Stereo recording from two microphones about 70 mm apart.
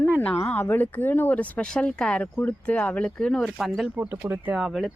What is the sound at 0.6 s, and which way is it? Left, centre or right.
Speech, left.